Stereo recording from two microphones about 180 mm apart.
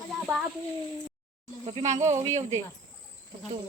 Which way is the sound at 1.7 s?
40° right (ahead or behind).